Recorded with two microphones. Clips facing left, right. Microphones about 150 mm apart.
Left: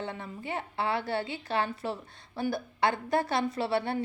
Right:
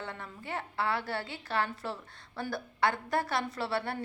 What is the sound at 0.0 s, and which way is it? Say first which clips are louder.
A woman's voice: left 5 dB; 20° left (ahead or behind).